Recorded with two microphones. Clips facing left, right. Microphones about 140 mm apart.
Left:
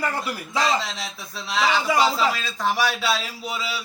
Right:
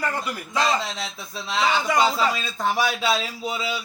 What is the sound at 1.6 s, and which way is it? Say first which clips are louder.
Speech: even; 5° left (ahead or behind).